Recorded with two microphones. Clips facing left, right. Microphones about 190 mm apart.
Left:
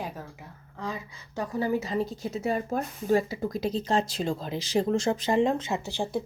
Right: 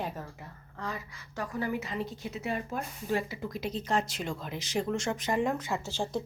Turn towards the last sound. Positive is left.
turn(degrees=15)  # may be behind; listen again after turning